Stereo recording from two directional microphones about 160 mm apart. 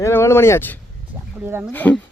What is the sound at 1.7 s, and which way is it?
Speech, 10° left (ahead or behind).